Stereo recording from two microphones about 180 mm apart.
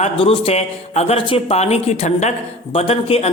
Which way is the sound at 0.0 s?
35° left (ahead or behind).